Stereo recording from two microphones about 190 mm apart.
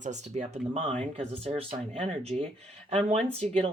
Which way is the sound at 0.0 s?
40° right (ahead or behind).